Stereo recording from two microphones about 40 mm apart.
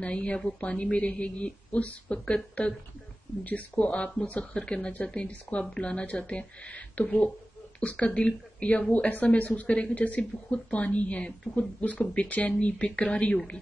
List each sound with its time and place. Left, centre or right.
0.0 s speech: left